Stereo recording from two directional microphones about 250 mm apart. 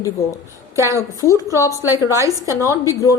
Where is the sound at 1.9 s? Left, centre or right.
Centre.